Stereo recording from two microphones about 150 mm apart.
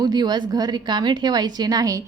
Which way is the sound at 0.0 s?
30° right (ahead or behind).